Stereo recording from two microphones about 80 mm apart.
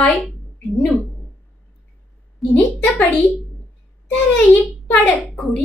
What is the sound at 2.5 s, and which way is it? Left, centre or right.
A woman's voice, left.